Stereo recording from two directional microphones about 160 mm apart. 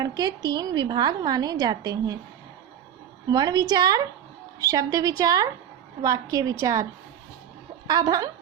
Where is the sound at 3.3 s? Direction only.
25° right (ahead or behind).